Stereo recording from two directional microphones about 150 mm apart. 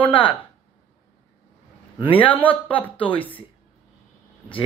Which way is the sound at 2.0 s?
35° left (ahead or behind).